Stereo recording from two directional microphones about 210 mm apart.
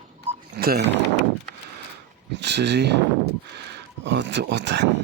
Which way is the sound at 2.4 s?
55° right (ahead or behind).